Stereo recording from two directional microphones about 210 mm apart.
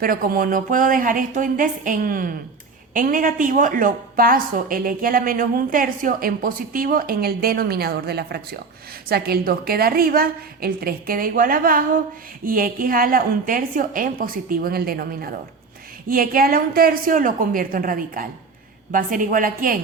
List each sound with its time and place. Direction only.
0.0 s a woman's voice: 45° right (ahead or behind)